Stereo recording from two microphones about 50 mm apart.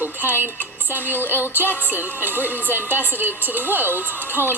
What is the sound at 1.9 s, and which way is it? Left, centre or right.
Speech, right.